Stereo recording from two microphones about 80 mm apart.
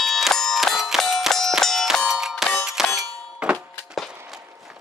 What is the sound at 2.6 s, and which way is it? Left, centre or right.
Clang, centre.